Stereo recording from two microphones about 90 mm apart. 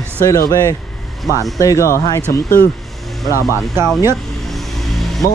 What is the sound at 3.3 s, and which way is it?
Speech, 30° right (ahead or behind).